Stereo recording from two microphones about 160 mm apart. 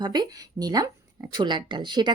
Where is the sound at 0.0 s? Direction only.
25° right (ahead or behind).